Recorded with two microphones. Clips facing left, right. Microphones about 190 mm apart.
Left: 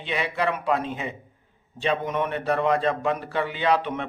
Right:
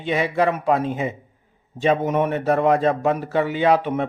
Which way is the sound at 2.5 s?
45° right (ahead or behind).